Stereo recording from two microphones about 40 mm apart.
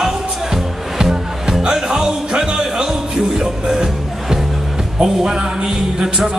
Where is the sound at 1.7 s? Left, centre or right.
Centre.